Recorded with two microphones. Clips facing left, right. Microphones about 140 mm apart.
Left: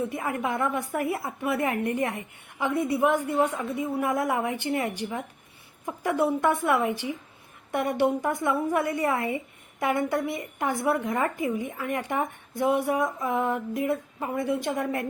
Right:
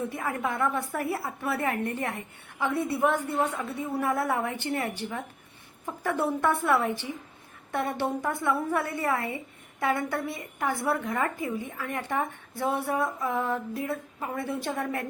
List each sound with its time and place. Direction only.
0.1 s a woman's voice: 20° left (ahead or behind)